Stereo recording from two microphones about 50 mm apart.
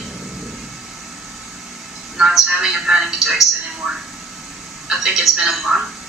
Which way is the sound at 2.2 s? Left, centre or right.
Centre.